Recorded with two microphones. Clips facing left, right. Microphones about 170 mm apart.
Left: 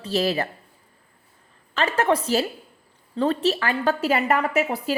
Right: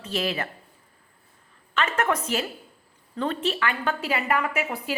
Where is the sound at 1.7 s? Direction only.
35° left (ahead or behind).